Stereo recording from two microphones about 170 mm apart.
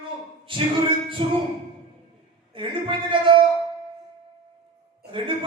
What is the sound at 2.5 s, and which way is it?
Speech, 30° right (ahead or behind).